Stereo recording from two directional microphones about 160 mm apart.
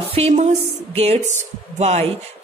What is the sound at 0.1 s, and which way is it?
Speech, 45° right (ahead or behind).